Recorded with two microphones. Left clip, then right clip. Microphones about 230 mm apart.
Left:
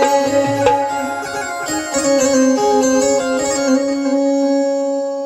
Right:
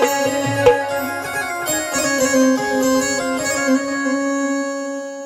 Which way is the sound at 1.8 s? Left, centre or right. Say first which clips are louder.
Left 5 dB; right.